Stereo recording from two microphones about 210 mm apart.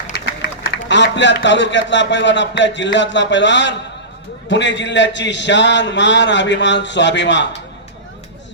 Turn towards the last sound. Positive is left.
turn(degrees=60)  # may be behind; listen again after turning